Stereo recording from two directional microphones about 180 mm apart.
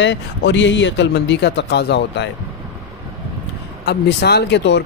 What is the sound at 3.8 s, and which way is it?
Speech, 65° left (ahead or behind).